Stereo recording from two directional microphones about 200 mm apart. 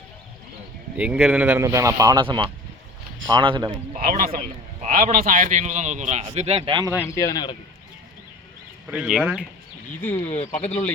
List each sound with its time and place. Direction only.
0.9 s speech: 5° right (ahead or behind); by 3.8 s 25° right (ahead or behind)
3.9 s a man's voice: 45° right (ahead or behind); by 6.9 s 25° right (ahead or behind)
7.0 s speech: 15° left (ahead or behind)
8.9 s speech: 5° right (ahead or behind)
10.0 s speech: 10° left (ahead or behind)
10.2 s speech: 35° left (ahead or behind)